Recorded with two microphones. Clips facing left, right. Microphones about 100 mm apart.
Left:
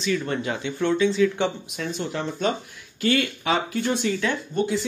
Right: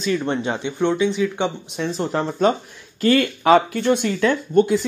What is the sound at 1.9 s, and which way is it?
Speech, 35° right (ahead or behind).